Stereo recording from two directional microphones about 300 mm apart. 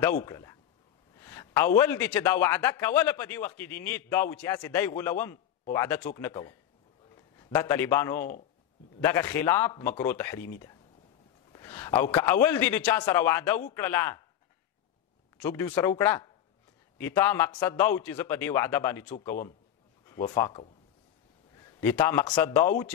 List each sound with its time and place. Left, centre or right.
0.2 s a man's voice: centre
1.2 s a sound: centre
1.8 s a man's voice: centre
11.5 s a man's voice: centre
15.3 s a man's voice: centre